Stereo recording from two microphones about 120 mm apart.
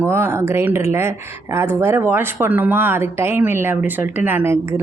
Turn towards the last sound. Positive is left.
turn(degrees=-20)  # may be behind; listen again after turning